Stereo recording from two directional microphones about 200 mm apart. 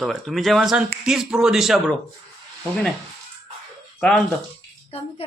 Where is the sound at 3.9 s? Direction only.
5° left (ahead or behind).